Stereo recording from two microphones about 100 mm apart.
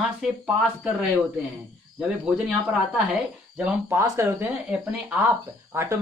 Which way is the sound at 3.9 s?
30° right (ahead or behind).